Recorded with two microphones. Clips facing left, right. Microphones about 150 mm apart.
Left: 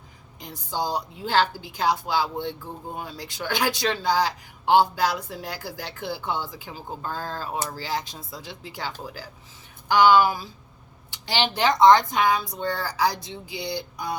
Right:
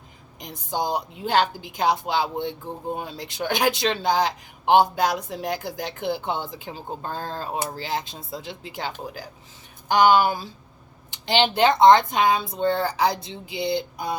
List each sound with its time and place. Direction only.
0.7 s speech: 20° right (ahead or behind)
11.1 s speech: 20° right (ahead or behind)